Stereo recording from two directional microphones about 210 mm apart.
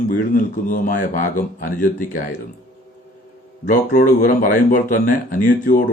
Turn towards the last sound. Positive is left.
turn(degrees=40)  # may be behind; listen again after turning